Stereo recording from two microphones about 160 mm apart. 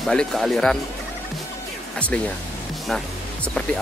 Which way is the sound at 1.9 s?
10° left (ahead or behind).